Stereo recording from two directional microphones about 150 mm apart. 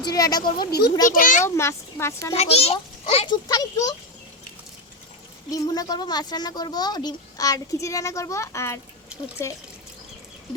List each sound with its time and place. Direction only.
0.0 s speech: 25° left (ahead or behind)
0.6 s a child's voice: 90° left
1.1 s a child's voice: 65° left (ahead or behind)
1.5 s a child's voice: 15° left (ahead or behind)
2.3 s a child's voice: 45° left (ahead or behind)
3.2 s speech: 25° left (ahead or behind)
5.5 s speech: 25° left (ahead or behind)